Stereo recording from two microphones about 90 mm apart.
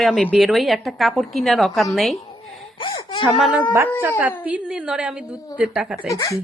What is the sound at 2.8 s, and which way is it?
Speech, 65° left (ahead or behind).